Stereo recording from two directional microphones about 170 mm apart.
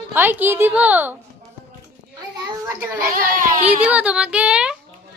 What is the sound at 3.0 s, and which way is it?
Speech, 55° right (ahead or behind).